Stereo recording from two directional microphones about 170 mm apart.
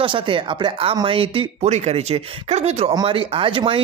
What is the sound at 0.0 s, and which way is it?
Speech, 30° right (ahead or behind).